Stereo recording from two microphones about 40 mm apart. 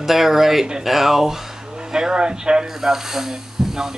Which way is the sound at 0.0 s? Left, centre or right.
Centre.